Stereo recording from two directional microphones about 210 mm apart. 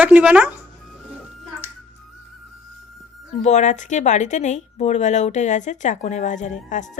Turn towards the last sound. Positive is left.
turn(degrees=35)  # may be behind; listen again after turning